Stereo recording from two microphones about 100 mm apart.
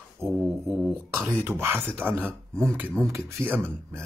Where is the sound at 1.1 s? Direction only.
20° right (ahead or behind).